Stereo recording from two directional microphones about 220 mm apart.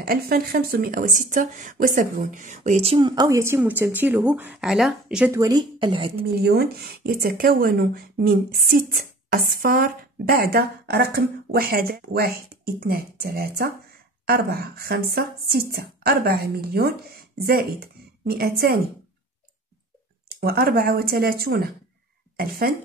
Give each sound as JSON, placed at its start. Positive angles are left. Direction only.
{"t": 0.0, "sound": "speech", "side_deg": -45}
{"t": 6.3, "sound": "speech", "side_deg": -45}
{"t": 20.3, "sound": "speech", "side_deg": -45}